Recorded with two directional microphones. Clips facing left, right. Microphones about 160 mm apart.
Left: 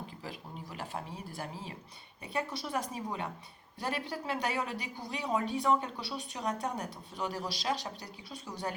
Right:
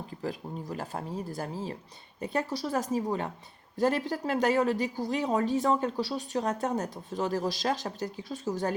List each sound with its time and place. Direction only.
0.2 s a woman's voice: 45° right (ahead or behind)